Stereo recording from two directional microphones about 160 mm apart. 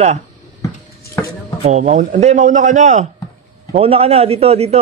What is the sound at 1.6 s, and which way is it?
A man's voice, 45° right (ahead or behind).